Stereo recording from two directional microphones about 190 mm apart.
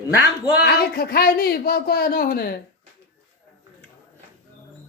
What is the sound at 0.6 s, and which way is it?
Speech, 55° left (ahead or behind).